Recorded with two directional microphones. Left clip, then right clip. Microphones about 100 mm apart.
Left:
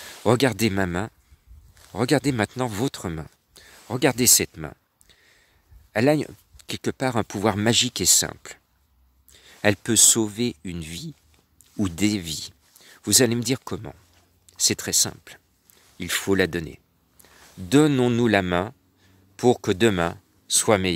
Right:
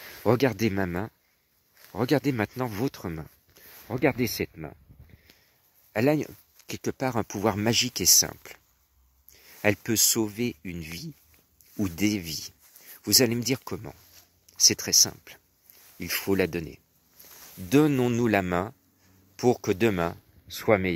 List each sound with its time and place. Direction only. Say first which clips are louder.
0.2 s speech: left 3 dB; 35° left (ahead or behind); by 4.5 s 50° left (ahead or behind)
4.6 s a sound: left 4 dB; 65° left (ahead or behind)
5.9 s speech: left 4 dB; 30° left (ahead or behind); by 20.9 s 50° left (ahead or behind)